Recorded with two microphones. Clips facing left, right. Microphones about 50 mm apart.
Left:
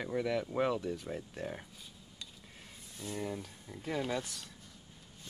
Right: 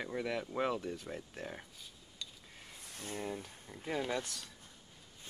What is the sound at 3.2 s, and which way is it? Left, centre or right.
Speech, centre.